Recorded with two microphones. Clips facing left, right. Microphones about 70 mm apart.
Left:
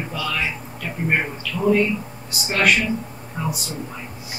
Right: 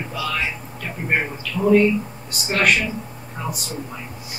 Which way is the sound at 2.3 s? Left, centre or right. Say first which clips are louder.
Even; centre.